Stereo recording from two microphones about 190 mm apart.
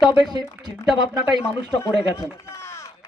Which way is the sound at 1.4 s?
15° left (ahead or behind).